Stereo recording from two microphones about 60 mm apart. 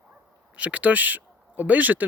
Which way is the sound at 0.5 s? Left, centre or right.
Right.